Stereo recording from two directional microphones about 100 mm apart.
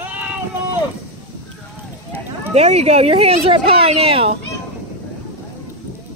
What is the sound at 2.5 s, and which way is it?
Speech, 90° right.